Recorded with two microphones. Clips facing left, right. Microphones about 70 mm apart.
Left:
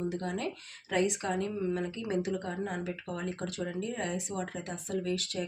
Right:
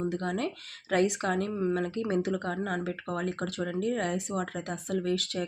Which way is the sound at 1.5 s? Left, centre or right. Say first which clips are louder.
Right 4 dB; right.